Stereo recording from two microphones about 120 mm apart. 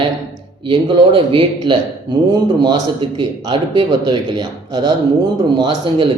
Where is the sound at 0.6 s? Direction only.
45° right (ahead or behind).